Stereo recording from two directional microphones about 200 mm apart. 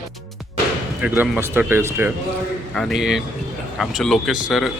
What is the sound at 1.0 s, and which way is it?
Speech, 10° right (ahead or behind).